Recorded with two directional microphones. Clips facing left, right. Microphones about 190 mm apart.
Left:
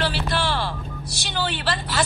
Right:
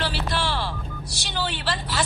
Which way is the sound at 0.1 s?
55° left (ahead or behind).